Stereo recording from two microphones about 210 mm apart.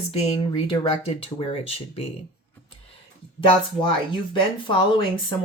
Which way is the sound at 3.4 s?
25° left (ahead or behind).